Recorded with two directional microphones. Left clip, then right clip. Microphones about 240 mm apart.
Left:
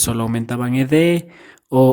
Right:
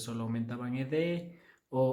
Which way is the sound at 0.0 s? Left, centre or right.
Left.